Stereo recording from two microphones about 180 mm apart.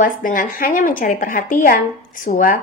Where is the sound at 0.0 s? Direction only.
50° left (ahead or behind).